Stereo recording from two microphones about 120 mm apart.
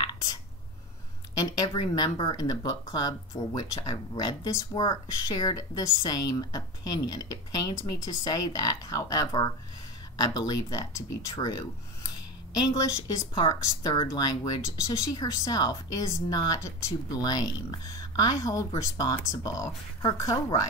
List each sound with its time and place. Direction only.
0.0 s whispering: 30° left (ahead or behind)
1.4 s speech: 30° left (ahead or behind)
13.3 s speech: 35° left (ahead or behind)